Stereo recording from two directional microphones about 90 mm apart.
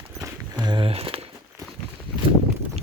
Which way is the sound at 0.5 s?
55° right (ahead or behind).